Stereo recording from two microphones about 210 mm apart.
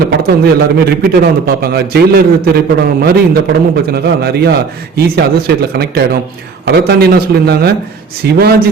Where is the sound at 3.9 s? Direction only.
50° right (ahead or behind).